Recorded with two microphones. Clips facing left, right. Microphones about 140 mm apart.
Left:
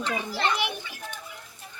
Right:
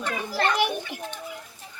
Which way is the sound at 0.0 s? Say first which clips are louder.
Right 2 dB; 50° right (ahead or behind).